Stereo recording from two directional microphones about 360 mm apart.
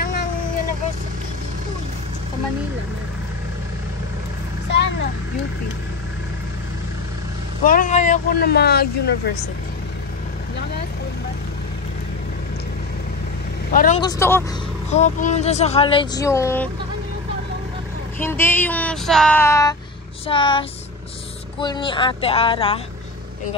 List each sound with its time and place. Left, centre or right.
4.6 s a sound: left
7.6 s speech: left
13.7 s speech: left
14.9 s speech: centre
18.2 s a sound: centre
20.2 s speech: centre